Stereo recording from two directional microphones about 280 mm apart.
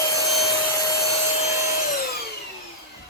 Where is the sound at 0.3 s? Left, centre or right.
Centre.